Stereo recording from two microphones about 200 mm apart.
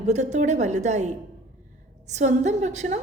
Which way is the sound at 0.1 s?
35° right (ahead or behind).